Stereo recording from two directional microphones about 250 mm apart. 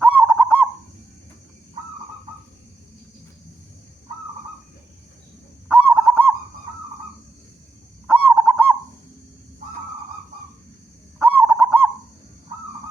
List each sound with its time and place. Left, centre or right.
0.0 s goose: centre
5.6 s goose: centre
8.0 s goose: centre
11.3 s owl: centre